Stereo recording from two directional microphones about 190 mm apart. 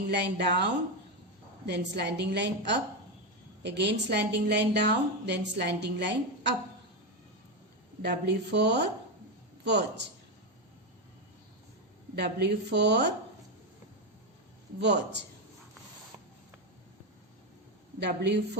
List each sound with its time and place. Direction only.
0.1 s a woman's voice: 60° right (ahead or behind)
8.0 s a woman's voice: 60° right (ahead or behind)
12.1 s a woman's voice: 65° right (ahead or behind)
14.8 s a woman's voice: 65° right (ahead or behind)
18.0 s a woman's voice: 65° right (ahead or behind)